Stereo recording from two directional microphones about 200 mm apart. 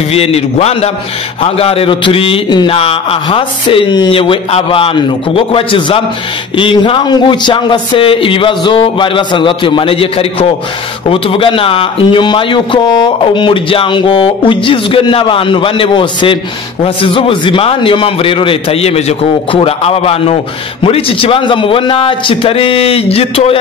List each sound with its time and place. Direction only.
0.1 s a man's voice: 30° left (ahead or behind)